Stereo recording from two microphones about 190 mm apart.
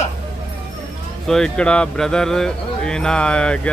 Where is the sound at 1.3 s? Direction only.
5° left (ahead or behind).